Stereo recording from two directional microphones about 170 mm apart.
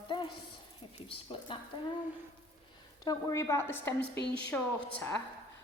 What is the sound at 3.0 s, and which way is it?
Speech, 20° left (ahead or behind).